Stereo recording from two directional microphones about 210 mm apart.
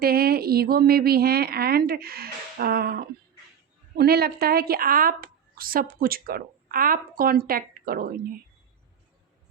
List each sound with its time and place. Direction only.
0.0 s a woman's voice: 45° right (ahead or behind)